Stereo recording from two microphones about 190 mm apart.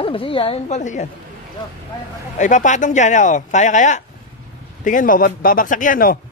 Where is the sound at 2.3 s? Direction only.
40° left (ahead or behind).